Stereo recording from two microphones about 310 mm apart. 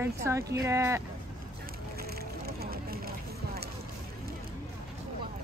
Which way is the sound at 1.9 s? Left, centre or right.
Right.